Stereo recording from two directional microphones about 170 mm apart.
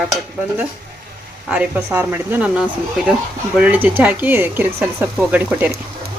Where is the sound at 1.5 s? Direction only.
5° right (ahead or behind).